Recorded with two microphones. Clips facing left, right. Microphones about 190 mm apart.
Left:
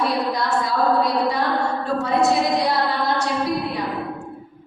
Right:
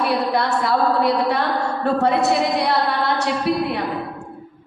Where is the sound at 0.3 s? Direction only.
65° right (ahead or behind).